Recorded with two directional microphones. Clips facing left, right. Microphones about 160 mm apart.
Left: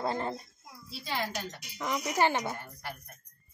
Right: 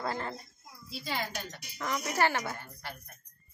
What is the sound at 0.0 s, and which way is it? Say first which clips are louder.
Speech: left 3 dB; 20° left (ahead or behind).